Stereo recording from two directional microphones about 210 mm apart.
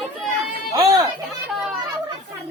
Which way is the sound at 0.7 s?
15° right (ahead or behind).